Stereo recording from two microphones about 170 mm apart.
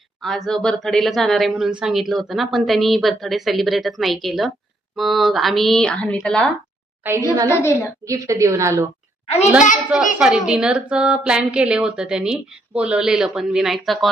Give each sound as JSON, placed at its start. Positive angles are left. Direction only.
{"t": 0.2, "sound": "speech", "side_deg": 0}
{"t": 7.3, "sound": "a woman's voice", "side_deg": -15}
{"t": 7.6, "sound": "a woman's voice", "side_deg": 15}
{"t": 8.0, "sound": "a woman's voice", "side_deg": -20}
{"t": 9.2, "sound": "a child's voice", "side_deg": 35}
{"t": 10.2, "sound": "speech", "side_deg": -5}